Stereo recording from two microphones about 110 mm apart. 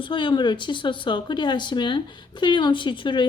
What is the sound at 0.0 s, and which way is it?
Speech, 45° left (ahead or behind).